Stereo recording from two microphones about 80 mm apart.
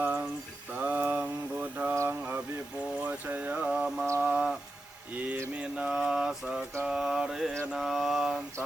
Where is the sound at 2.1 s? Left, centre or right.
Right.